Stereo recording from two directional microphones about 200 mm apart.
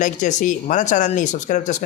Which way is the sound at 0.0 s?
40° left (ahead or behind).